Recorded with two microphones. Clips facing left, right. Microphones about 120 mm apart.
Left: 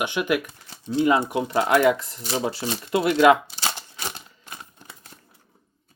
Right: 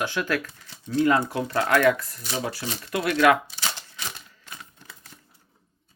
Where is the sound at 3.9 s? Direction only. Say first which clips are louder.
Left 3 dB; 35° left (ahead or behind).